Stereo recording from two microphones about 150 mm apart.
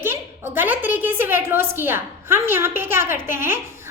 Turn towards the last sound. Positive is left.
turn(degrees=-15)  # may be behind; listen again after turning